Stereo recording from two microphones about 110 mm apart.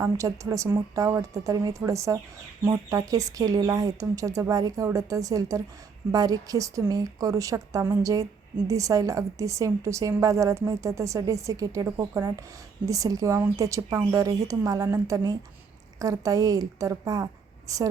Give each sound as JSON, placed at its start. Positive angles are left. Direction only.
{"t": 0.0, "sound": "a woman's voice", "side_deg": -30}